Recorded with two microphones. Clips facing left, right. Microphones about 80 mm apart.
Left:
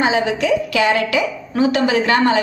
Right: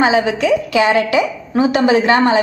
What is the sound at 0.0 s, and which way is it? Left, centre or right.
A woman's voice, right.